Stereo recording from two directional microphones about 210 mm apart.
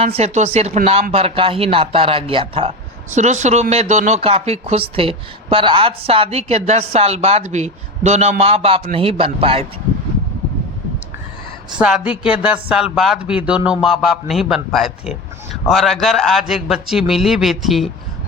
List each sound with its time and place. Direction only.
0.0 s speech: 30° right (ahead or behind)
11.8 s a man's voice: 5° right (ahead or behind)